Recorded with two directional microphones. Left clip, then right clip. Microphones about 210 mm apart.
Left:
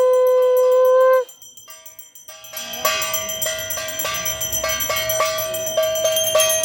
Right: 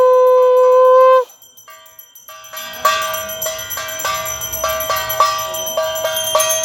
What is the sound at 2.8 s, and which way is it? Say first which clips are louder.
Music: right 5 dB; 60° left (ahead or behind).